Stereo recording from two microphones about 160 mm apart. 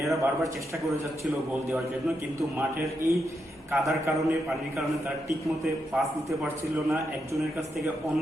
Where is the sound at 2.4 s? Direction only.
20° right (ahead or behind).